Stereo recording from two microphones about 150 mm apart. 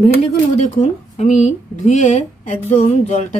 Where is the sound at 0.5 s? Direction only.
50° left (ahead or behind).